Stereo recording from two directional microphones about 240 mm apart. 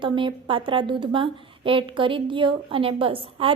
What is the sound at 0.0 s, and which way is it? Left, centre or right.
A woman's voice, right.